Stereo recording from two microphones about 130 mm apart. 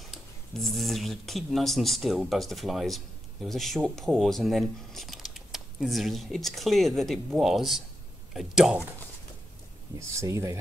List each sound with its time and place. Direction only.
0.1 s speech: centre (ahead or behind)
9.9 s speech: 25° right (ahead or behind)